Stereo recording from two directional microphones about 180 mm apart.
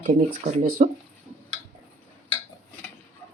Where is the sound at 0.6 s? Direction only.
50° right (ahead or behind).